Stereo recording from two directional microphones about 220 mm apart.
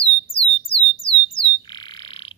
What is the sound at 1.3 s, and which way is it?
Frog, 20° left (ahead or behind).